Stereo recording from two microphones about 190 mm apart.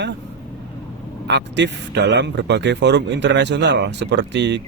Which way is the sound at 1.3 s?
65° right (ahead or behind).